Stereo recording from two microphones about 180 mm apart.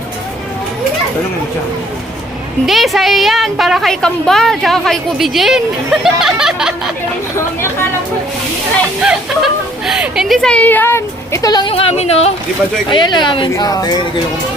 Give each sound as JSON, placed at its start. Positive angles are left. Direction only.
{"t": 2.6, "sound": "a woman's voice", "side_deg": 0}
{"t": 9.0, "sound": "speech", "side_deg": -5}
{"t": 11.7, "sound": "speech", "side_deg": 35}
{"t": 12.9, "sound": "speech", "side_deg": 25}